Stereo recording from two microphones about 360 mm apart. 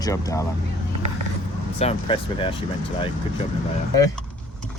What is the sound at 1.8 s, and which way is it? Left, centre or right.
Speech, centre.